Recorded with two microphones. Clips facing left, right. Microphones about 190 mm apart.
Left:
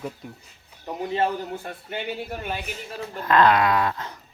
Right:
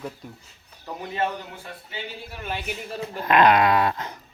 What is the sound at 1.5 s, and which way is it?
Speech, 50° left (ahead or behind).